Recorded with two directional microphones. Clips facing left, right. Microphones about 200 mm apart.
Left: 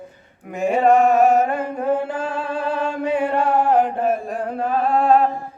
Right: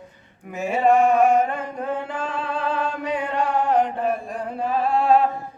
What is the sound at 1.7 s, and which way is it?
Music, 10° left (ahead or behind).